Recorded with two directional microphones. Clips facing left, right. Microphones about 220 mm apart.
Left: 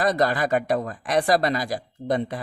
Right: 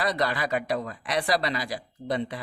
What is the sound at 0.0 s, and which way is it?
Speech, 45° left (ahead or behind).